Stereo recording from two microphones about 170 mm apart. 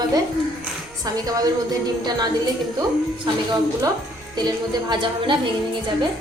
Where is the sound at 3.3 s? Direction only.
30° right (ahead or behind).